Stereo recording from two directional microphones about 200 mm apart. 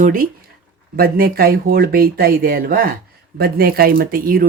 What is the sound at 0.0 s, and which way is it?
Speech, 40° right (ahead or behind).